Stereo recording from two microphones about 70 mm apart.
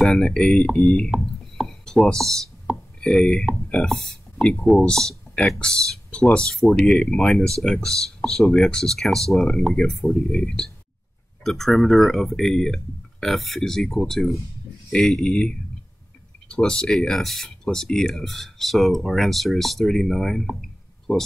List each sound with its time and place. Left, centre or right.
0.0 s speech: centre
1.1 s speech: centre
16.4 s speech: centre